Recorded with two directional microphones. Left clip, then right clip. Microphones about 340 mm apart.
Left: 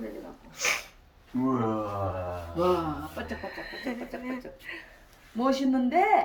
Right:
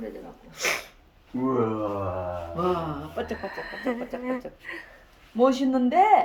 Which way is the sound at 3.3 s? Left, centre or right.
Centre.